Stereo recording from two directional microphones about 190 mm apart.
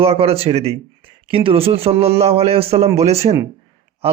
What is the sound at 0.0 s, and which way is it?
A man's voice, 30° right (ahead or behind).